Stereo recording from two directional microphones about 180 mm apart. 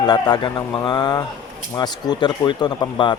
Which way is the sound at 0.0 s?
20° left (ahead or behind).